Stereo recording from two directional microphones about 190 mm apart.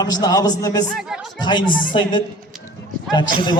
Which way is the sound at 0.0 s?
20° left (ahead or behind).